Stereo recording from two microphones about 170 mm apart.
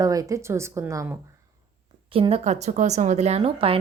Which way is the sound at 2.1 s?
35° right (ahead or behind).